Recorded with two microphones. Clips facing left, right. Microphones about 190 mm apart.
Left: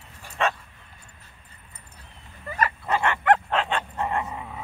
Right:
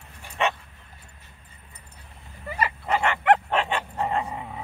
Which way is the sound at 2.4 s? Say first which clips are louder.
Left 1 dB; 10° right (ahead or behind).